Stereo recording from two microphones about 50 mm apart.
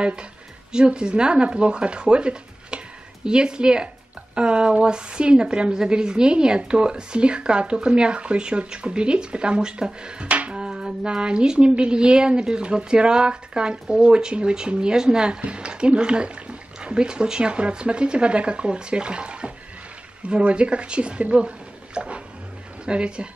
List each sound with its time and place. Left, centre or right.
0.0 s a woman's voice: centre